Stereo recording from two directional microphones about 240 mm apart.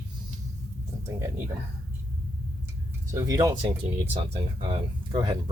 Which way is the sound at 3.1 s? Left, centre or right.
Centre.